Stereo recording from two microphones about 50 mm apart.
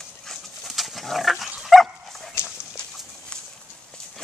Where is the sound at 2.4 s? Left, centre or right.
Left.